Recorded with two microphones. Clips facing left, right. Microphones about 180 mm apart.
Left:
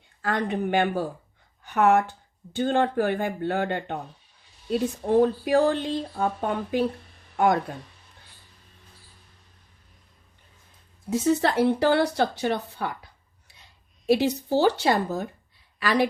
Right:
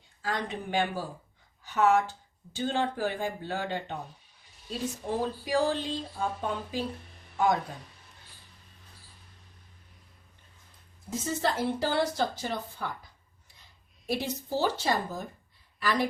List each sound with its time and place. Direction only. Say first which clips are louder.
0.2 s speech: left 7 dB; 60° left (ahead or behind)
11.1 s speech: left 8 dB; 70° left (ahead or behind)
14.1 s speech: left 10 dB; 70° left (ahead or behind)